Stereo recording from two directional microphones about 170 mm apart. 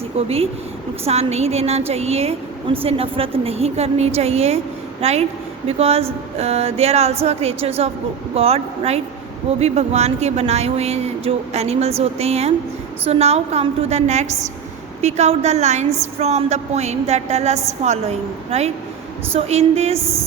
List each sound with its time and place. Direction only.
0.1 s a woman's voice: 35° right (ahead or behind)